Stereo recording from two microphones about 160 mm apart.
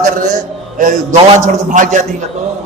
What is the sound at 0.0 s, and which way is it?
Speech, 50° right (ahead or behind).